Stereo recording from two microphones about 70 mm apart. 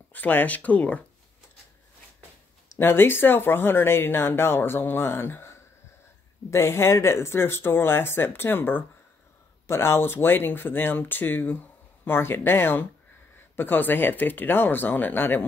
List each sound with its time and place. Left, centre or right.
0.1 s speech: left
2.8 s speech: left